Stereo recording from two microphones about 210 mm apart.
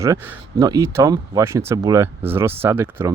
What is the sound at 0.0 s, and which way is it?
Speech, 10° right (ahead or behind).